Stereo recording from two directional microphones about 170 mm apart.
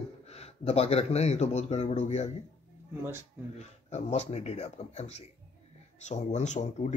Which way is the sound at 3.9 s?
40° left (ahead or behind).